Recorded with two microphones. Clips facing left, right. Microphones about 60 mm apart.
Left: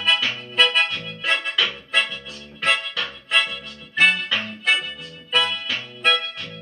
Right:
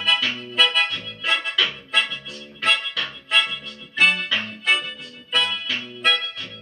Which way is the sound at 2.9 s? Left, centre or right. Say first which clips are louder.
Even; centre.